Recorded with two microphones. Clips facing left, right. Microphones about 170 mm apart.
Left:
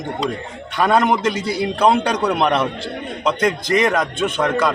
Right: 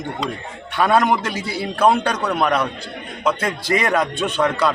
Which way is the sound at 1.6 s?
5° right (ahead or behind).